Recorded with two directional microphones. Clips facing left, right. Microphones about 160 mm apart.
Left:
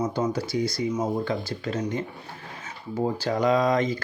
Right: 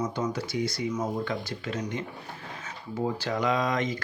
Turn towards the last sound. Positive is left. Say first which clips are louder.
# left 5 dB
turn(degrees=35)  # may be behind; listen again after turning